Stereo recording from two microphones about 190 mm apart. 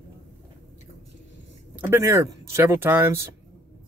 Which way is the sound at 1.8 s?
15° right (ahead or behind).